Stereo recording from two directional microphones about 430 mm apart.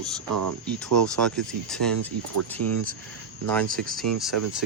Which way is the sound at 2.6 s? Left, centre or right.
Right.